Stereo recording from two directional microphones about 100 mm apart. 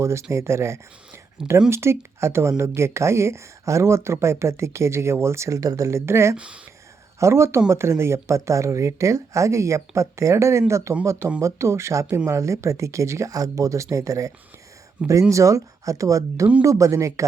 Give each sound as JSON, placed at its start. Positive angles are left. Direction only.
{"t": 0.0, "sound": "speech", "side_deg": -30}
{"t": 6.3, "sound": "speech", "side_deg": -10}
{"t": 7.2, "sound": "speech", "side_deg": -25}